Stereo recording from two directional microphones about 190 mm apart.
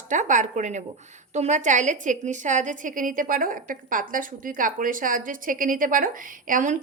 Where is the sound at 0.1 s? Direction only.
40° right (ahead or behind).